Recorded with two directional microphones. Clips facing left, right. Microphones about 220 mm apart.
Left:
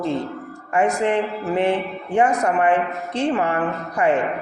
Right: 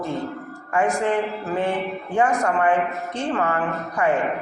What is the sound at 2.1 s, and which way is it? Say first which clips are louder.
A woman's voice: left 2 dB; 20° left (ahead or behind).